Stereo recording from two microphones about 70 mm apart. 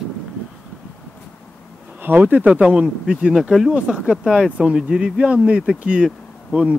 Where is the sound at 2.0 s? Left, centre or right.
Right.